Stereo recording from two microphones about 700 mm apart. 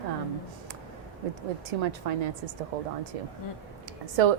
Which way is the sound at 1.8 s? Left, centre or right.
Right.